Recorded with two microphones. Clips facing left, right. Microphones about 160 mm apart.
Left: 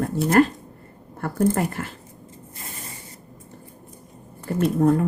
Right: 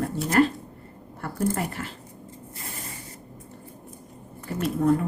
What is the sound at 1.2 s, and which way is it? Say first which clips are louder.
Speech: left 5 dB; 45° left (ahead or behind).